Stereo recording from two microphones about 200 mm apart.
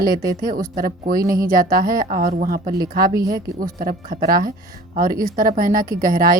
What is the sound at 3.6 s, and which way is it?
A woman's voice, 45° right (ahead or behind).